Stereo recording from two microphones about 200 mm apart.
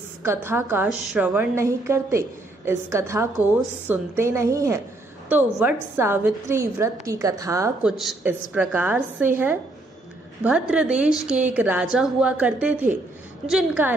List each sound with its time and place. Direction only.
0.2 s a woman's voice: 10° right (ahead or behind)
8.0 s a woman's voice: 5° right (ahead or behind)